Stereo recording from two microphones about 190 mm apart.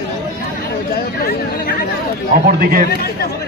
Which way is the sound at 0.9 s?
50° left (ahead or behind).